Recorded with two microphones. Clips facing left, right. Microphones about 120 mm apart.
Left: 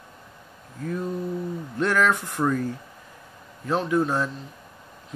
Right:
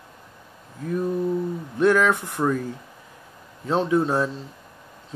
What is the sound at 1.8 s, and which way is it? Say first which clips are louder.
Speech: right 4 dB; 15° right (ahead or behind).